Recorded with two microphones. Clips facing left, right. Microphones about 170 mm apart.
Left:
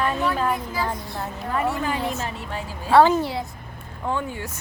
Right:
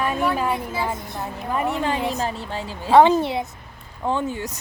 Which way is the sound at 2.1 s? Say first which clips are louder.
Right 3 dB; 30° right (ahead or behind).